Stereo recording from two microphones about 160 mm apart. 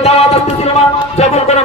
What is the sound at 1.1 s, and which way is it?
Speech, 40° left (ahead or behind).